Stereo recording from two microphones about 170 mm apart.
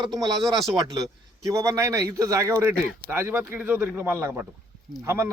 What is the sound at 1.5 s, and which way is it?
A man's voice, 20° right (ahead or behind).